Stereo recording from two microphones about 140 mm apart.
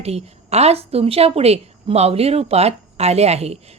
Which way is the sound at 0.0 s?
50° right (ahead or behind).